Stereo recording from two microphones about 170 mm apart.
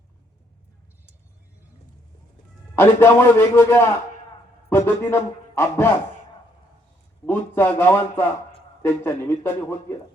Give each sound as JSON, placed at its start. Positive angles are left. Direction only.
{"t": 2.7, "sound": "speech", "side_deg": 15}
{"t": 7.3, "sound": "speech", "side_deg": 10}